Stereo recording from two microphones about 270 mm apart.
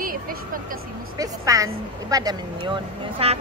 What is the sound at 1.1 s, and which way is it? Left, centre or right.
A woman's voice, centre.